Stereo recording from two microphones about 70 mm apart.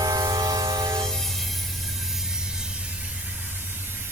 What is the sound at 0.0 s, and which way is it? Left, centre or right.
Train, right.